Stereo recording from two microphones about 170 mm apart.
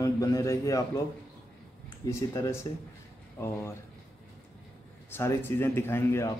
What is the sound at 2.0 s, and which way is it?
A man's voice, 20° left (ahead or behind).